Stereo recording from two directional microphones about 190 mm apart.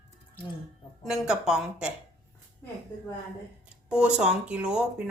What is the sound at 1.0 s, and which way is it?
Speech, centre (ahead or behind).